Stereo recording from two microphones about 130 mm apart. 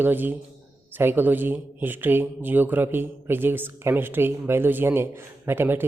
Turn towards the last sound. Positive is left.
turn(degrees=-15)  # may be behind; listen again after turning